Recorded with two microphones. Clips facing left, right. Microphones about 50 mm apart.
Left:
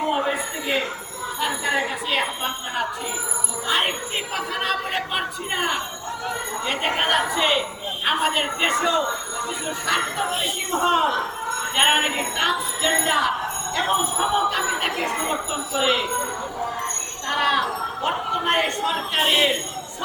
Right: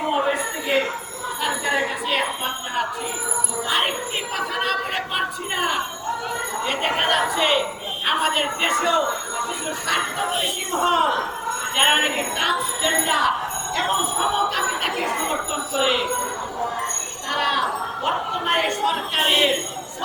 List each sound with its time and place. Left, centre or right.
0.3 s wind chime: centre
1.4 s jingle bell: centre
2.0 s wind chime: centre
3.7 s speech: centre
4.4 s wind chime: centre
17.2 s speech: centre
17.6 s a sound: centre
19.2 s speech: centre